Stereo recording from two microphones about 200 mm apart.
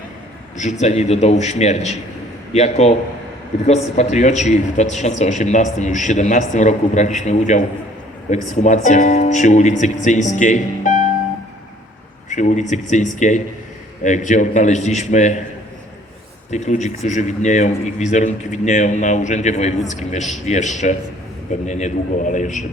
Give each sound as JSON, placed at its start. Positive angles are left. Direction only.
{"t": 0.5, "sound": "speech", "side_deg": 35}
{"t": 12.3, "sound": "speech", "side_deg": 35}
{"t": 16.5, "sound": "speech", "side_deg": 35}
{"t": 21.7, "sound": "speech", "side_deg": 35}